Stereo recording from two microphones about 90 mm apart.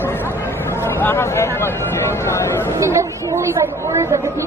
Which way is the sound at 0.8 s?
25° left (ahead or behind).